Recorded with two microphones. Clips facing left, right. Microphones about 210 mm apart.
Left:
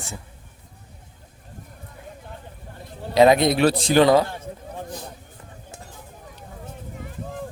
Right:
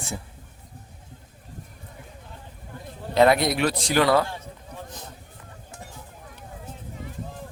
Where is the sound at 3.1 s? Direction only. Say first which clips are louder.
Left 3 dB; 20° left (ahead or behind).